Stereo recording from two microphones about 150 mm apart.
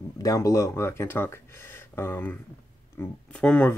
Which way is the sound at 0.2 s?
20° left (ahead or behind).